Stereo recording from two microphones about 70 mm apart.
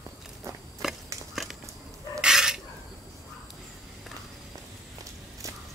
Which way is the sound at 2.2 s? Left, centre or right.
Centre.